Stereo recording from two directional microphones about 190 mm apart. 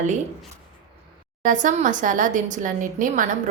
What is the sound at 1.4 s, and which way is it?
A woman's voice, 40° right (ahead or behind).